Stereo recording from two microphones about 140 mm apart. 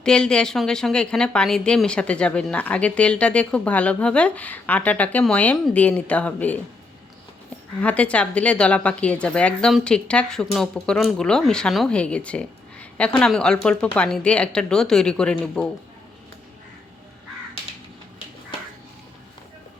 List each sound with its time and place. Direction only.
0.0 s a woman's voice: 5° left (ahead or behind)
7.8 s a woman's voice: 10° left (ahead or behind)